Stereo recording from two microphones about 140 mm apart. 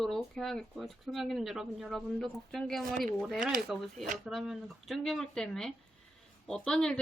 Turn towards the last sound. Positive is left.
turn(degrees=5)  # may be behind; listen again after turning